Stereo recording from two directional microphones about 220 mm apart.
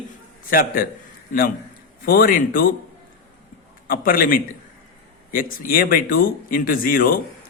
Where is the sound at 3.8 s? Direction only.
40° left (ahead or behind).